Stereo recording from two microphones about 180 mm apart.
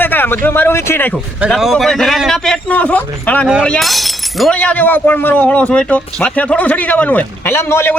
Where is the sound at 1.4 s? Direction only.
Centre (ahead or behind).